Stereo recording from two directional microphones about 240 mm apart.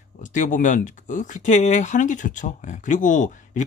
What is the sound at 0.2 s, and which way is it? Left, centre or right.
Speech, left.